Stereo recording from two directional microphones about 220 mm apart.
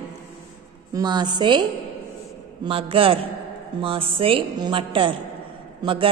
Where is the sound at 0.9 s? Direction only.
20° right (ahead or behind).